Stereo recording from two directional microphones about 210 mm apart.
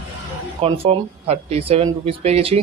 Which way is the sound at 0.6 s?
25° right (ahead or behind).